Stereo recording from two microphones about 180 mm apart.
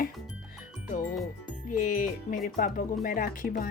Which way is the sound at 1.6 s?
50° left (ahead or behind).